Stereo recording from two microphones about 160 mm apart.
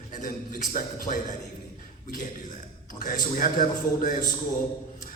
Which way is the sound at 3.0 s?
55° left (ahead or behind).